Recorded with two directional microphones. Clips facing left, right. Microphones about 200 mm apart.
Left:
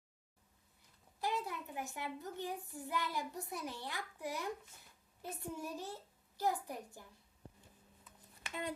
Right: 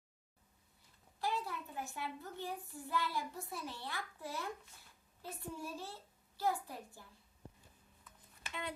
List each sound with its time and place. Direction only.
1.2 s a child's voice: 20° left (ahead or behind)